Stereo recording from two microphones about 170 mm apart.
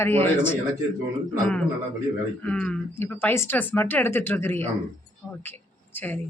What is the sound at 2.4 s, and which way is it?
A woman's voice, 5° left (ahead or behind).